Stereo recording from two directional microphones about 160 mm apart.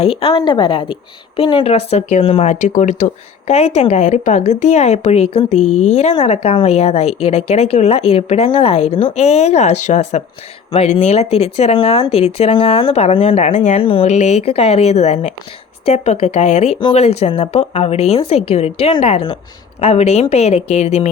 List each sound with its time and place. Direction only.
0.0 s a woman's voice: 35° left (ahead or behind)